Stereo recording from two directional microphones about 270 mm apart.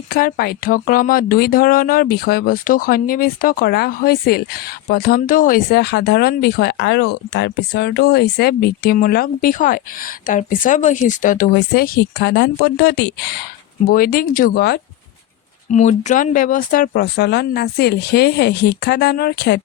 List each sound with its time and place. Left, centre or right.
0.1 s speech: left